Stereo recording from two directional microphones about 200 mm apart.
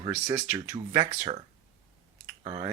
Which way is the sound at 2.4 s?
20° right (ahead or behind).